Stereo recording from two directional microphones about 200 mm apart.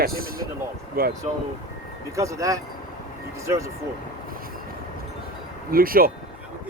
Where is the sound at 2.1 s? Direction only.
15° right (ahead or behind).